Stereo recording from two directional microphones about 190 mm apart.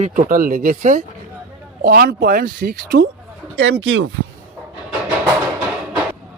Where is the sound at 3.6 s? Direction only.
85° right.